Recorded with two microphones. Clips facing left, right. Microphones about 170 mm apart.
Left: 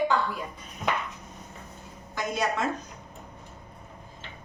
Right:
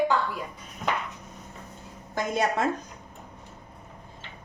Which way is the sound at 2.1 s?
55° right (ahead or behind).